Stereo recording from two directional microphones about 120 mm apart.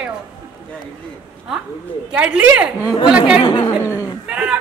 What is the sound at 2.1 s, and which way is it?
A man's voice, 10° right (ahead or behind).